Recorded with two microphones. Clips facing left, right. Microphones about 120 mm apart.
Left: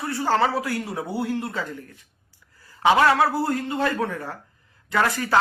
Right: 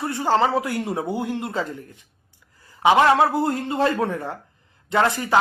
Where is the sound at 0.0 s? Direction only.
20° right (ahead or behind).